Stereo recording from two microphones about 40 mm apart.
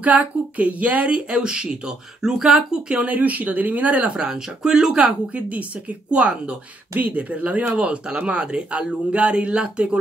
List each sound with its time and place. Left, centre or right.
0.0 s speech: right; by 2.6 s centre
2.9 s speech: right
4.1 s speech: right
5.3 s speech: right